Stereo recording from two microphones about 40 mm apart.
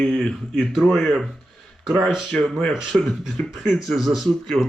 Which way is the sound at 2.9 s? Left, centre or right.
Centre.